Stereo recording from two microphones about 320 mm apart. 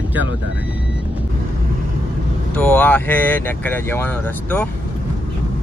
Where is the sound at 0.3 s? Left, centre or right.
Right.